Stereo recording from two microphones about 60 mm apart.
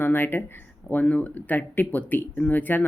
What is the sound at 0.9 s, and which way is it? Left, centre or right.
Speech, left.